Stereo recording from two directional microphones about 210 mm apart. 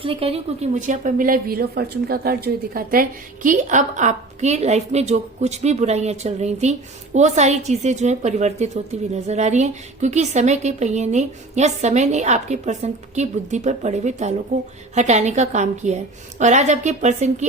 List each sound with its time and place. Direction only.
0.0 s a woman's voice: 25° right (ahead or behind)